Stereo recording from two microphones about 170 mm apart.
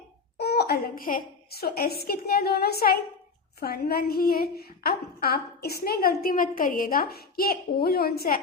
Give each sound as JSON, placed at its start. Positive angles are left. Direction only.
{"t": 0.3, "sound": "a woman's voice", "side_deg": 70}